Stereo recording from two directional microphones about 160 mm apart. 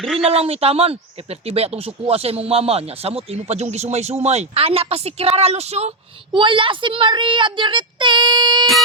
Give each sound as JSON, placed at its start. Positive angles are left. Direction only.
{"t": 0.0, "sound": "speech", "side_deg": 0}
{"t": 0.3, "sound": "speech", "side_deg": -40}